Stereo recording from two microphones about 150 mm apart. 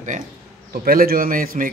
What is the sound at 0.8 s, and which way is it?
Speech, 75° right (ahead or behind).